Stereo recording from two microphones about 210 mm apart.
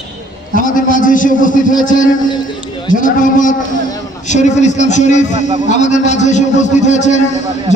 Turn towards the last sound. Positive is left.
turn(degrees=35)  # may be behind; listen again after turning